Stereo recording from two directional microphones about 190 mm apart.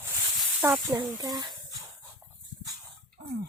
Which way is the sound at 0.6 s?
10° right (ahead or behind).